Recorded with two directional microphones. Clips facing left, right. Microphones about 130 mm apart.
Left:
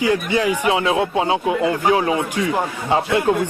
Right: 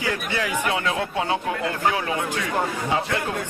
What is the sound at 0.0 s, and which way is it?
A man's voice, 15° left (ahead or behind).